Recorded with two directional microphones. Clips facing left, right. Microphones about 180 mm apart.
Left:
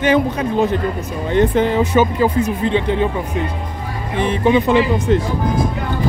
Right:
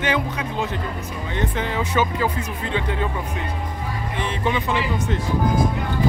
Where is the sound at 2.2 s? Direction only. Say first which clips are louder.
Left 8 dB; 25° left (ahead or behind).